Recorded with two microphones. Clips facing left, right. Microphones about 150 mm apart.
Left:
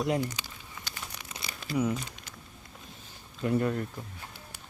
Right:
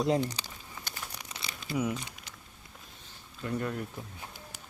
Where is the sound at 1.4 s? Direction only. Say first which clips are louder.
Left 2 dB; 25° right (ahead or behind).